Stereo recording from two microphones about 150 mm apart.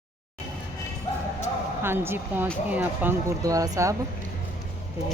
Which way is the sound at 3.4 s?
25° right (ahead or behind).